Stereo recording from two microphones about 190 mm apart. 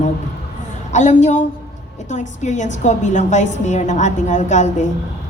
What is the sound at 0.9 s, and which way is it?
A woman's voice, 40° left (ahead or behind).